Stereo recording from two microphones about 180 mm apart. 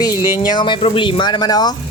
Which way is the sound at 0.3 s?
25° left (ahead or behind).